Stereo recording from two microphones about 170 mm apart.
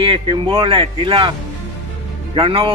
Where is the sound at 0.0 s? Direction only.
30° right (ahead or behind).